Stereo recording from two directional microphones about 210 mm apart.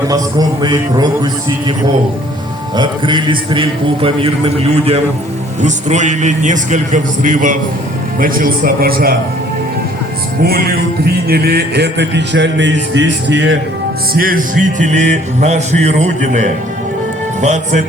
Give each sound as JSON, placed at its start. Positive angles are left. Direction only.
{"t": 0.1, "sound": "a man's voice", "side_deg": -20}
{"t": 2.7, "sound": "a man's voice", "side_deg": -20}
{"t": 5.6, "sound": "music", "side_deg": -35}
{"t": 10.4, "sound": "music", "side_deg": -45}
{"t": 14.1, "sound": "music", "side_deg": -45}